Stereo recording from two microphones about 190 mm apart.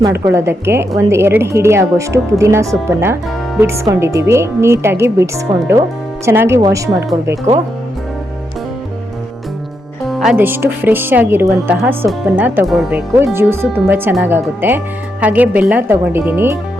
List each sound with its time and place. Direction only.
0.0 s a woman's voice: 15° right (ahead or behind)
10.1 s a woman's voice: centre (ahead or behind)